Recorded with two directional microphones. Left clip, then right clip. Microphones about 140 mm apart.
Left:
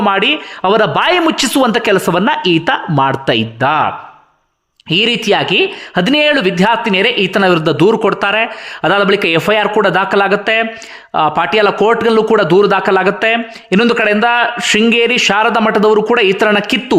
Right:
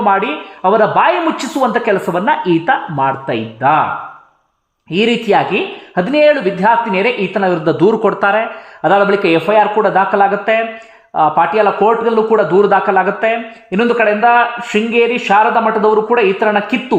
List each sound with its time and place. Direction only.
0.0 s a man's voice: 25° left (ahead or behind); by 3.4 s 40° left (ahead or behind)
3.6 s speech: 25° left (ahead or behind)
4.9 s speech: 30° left (ahead or behind)
9.5 s a man's voice: 35° left (ahead or behind)
11.8 s a man's voice: 45° left (ahead or behind)